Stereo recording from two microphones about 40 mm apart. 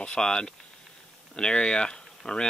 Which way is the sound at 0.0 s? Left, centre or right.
Left.